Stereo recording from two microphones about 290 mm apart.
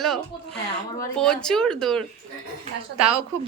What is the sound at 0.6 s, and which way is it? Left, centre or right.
Speech, centre.